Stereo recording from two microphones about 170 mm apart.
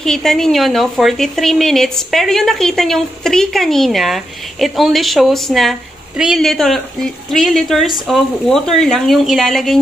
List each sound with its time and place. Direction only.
0.0 s speech: 5° left (ahead or behind)